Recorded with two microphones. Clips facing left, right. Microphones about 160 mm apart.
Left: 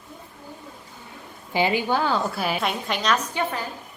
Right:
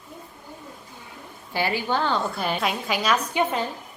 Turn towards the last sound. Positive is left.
turn(degrees=-20)  # may be behind; listen again after turning